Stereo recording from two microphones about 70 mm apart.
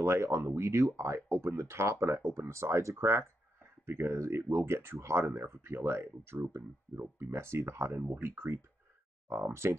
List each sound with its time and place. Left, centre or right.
0.0 s speech: right